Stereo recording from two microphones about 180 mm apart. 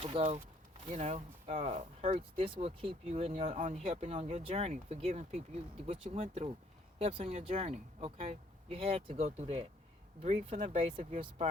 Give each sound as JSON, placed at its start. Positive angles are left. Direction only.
{"t": 0.0, "sound": "speech", "side_deg": -30}